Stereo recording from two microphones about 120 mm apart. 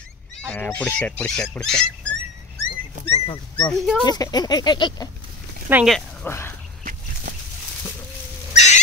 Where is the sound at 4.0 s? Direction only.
35° left (ahead or behind).